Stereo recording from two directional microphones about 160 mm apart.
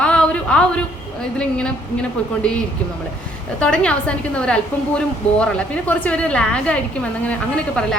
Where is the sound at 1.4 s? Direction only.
5° left (ahead or behind).